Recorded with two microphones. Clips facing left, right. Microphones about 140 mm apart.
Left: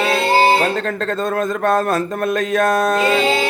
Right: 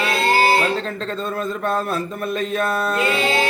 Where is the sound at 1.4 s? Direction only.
80° left.